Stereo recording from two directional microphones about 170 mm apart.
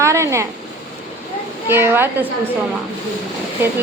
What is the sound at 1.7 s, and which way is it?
Speech, 15° right (ahead or behind).